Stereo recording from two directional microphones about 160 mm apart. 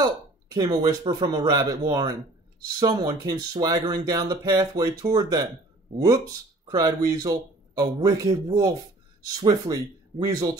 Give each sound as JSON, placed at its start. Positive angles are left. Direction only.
{"t": 0.0, "sound": "speech", "side_deg": -25}